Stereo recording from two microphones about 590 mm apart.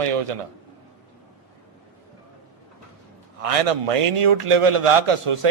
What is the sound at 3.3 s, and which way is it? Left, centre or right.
A man's voice, right.